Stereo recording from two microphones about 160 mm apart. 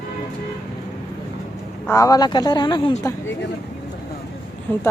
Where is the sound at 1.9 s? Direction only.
20° left (ahead or behind).